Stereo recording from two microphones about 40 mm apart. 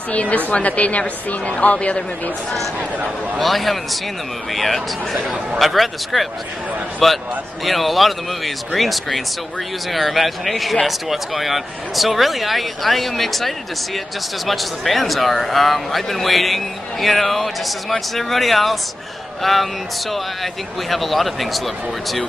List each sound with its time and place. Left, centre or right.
0.1 s a woman's voice: left
3.3 s speech: centre